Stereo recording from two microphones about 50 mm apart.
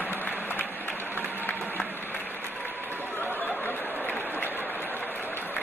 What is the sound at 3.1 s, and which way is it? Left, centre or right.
Chatter, left.